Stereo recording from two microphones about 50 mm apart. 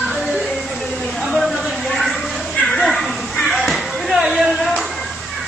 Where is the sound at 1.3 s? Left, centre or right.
Centre.